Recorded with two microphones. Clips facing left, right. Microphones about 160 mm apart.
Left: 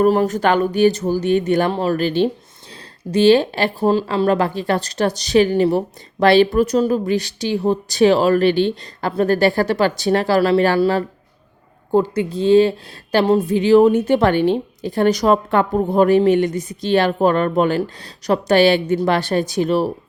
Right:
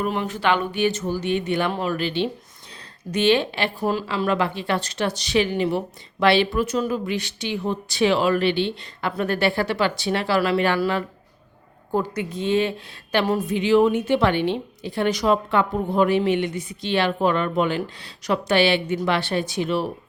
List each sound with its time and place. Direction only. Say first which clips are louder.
0.0 s speech: left 9 dB; 40° left (ahead or behind)
4.0 s speech: left 6 dB; 40° left (ahead or behind)